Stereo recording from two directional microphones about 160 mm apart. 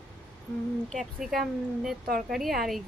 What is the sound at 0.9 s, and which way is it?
Speech, centre (ahead or behind).